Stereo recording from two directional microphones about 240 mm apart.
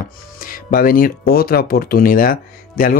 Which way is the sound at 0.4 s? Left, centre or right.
Left.